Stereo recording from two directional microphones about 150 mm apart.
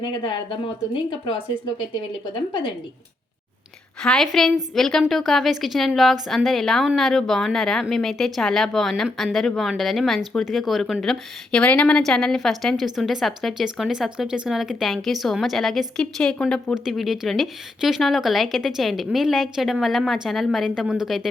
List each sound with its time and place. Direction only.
0.0 s speech: 30° left (ahead or behind)
4.0 s a woman's voice: 5° left (ahead or behind)